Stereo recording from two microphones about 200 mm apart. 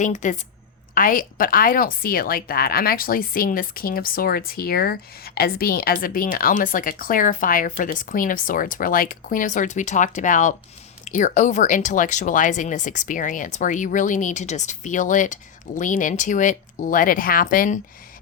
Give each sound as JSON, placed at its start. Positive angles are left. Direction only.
{"t": 0.0, "sound": "a woman's voice", "side_deg": 40}